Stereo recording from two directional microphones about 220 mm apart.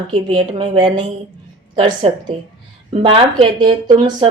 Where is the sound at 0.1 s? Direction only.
20° right (ahead or behind).